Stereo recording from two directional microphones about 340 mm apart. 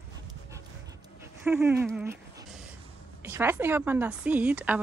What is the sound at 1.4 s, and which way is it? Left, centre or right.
A woman's voice, centre.